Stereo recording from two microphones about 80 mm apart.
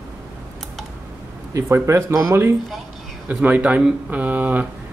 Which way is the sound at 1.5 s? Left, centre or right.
Right.